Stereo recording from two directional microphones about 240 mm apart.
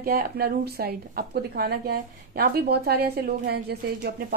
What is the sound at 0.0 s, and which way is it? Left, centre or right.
A woman's voice, right.